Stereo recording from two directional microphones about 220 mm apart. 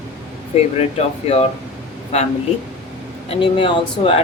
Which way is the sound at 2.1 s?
30° left (ahead or behind).